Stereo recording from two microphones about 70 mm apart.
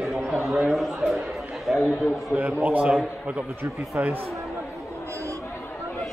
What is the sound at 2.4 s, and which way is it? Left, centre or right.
Speech, right.